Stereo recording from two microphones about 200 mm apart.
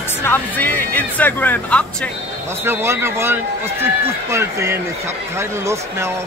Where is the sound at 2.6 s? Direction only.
10° right (ahead or behind).